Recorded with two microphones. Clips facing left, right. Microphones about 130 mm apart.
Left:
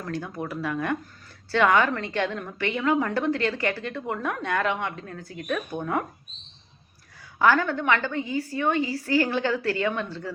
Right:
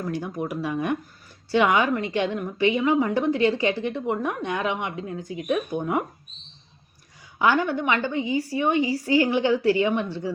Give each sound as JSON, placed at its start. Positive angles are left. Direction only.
{"t": 0.0, "sound": "a woman's voice", "side_deg": -15}
{"t": 7.3, "sound": "a woman's voice", "side_deg": -20}